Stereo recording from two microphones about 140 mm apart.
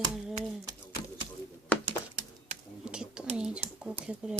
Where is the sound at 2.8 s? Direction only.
5° right (ahead or behind).